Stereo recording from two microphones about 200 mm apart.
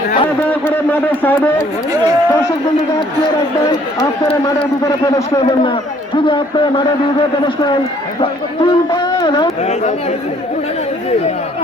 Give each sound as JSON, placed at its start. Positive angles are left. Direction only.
{"t": 0.4, "sound": "a man's voice", "side_deg": 10}
{"t": 4.8, "sound": "a man's voice", "side_deg": 15}